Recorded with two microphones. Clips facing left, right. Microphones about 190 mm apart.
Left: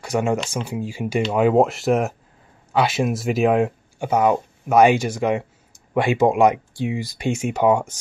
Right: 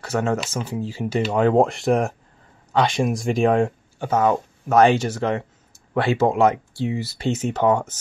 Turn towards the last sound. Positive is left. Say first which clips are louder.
# left 1 dB
turn(degrees=10)  # may be behind; listen again after turning